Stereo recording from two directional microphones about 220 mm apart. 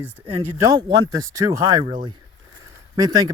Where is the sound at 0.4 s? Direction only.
15° right (ahead or behind).